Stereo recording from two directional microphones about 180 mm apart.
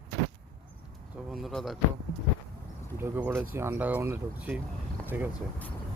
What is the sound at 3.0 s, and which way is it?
Speech, 10° right (ahead or behind).